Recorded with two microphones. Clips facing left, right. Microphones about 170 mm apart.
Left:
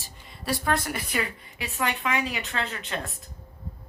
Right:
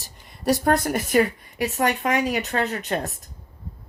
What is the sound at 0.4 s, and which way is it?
Speech, 45° right (ahead or behind).